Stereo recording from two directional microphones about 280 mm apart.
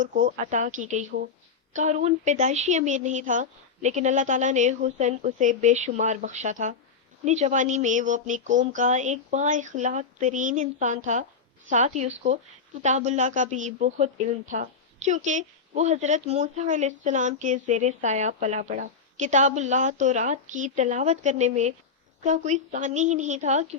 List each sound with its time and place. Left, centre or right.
0.0 s a woman's voice: right